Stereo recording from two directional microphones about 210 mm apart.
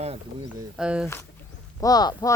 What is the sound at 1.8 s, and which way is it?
Speech, 20° left (ahead or behind).